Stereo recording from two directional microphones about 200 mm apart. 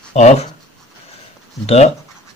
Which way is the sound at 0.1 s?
30° left (ahead or behind).